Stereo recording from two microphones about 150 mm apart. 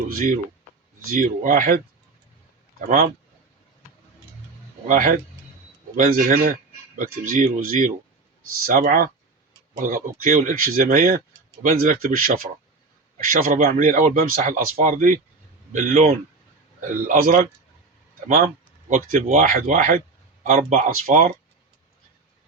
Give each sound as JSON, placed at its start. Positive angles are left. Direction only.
{"t": 1.1, "sound": "speech", "side_deg": -70}
{"t": 2.8, "sound": "speech", "side_deg": -70}
{"t": 4.9, "sound": "speech", "side_deg": -65}
{"t": 16.8, "sound": "speech", "side_deg": -65}
{"t": 18.3, "sound": "a sound", "side_deg": -70}
{"t": 19.3, "sound": "speech", "side_deg": -60}